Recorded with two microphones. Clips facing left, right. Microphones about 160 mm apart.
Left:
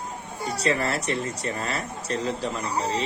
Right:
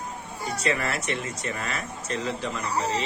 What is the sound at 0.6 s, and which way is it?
Speech, 35° left (ahead or behind).